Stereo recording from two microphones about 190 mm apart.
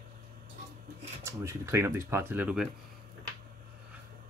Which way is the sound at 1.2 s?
15° right (ahead or behind).